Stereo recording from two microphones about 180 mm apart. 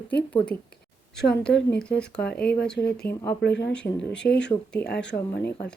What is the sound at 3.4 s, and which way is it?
Speech, 75° left (ahead or behind).